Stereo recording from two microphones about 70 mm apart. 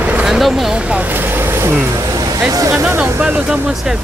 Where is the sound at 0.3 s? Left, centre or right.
Centre.